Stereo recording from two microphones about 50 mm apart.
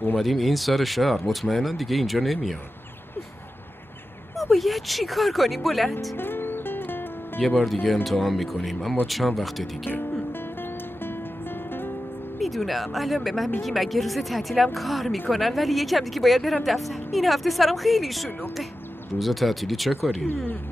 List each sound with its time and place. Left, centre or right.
0.2 s speech: centre
4.4 s speech: centre
6.1 s music: left
7.6 s speech: centre
12.4 s speech: centre